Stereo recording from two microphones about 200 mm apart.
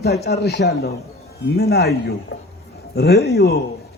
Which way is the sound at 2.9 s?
55° left (ahead or behind).